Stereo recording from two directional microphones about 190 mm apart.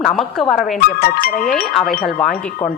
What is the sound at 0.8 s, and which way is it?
Speech, 55° left (ahead or behind).